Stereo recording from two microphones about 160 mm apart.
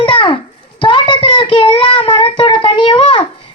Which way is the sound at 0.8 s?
35° left (ahead or behind).